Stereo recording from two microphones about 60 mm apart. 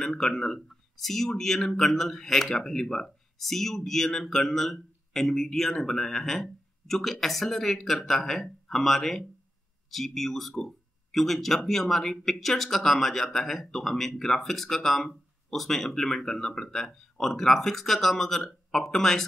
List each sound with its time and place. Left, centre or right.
0.0 s speech: centre